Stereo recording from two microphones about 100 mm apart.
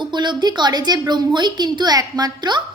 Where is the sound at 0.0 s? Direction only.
50° right (ahead or behind).